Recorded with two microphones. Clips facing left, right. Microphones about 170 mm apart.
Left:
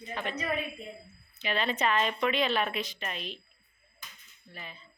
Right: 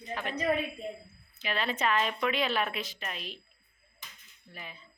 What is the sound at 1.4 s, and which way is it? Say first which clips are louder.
A woman's voice: left 1 dB; 5° right (ahead or behind).